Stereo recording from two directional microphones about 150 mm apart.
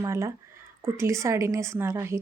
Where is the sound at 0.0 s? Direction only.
20° right (ahead or behind).